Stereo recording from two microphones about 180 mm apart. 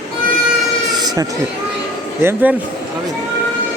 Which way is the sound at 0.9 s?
20° right (ahead or behind).